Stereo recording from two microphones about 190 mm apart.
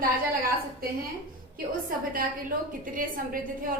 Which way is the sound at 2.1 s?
45° right (ahead or behind).